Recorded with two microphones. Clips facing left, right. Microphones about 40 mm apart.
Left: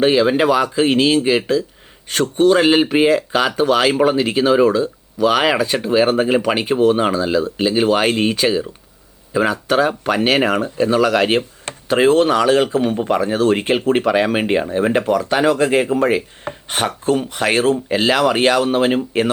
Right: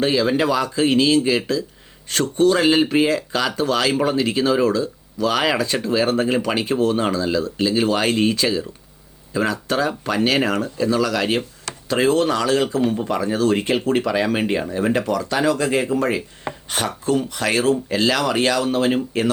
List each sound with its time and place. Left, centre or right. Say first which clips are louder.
0.0 s speech: left 4 dB; left
10.8 s speech: left 5 dB; left